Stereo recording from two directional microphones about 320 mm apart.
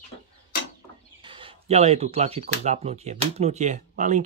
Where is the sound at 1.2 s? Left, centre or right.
Centre.